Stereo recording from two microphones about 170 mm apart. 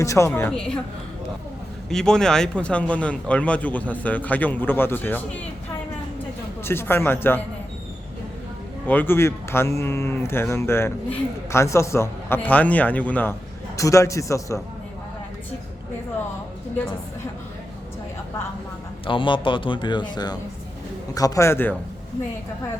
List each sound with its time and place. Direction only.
0.0 s speech: 15° left (ahead or behind)
1.9 s speech: 5° left (ahead or behind)
6.7 s speech: 15° left (ahead or behind)
8.9 s speech: 10° left (ahead or behind)
19.0 s speech: 30° left (ahead or behind); by 21.8 s 15° left (ahead or behind)